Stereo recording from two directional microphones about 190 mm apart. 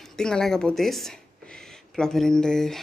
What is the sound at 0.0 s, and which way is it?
Speech, 5° left (ahead or behind).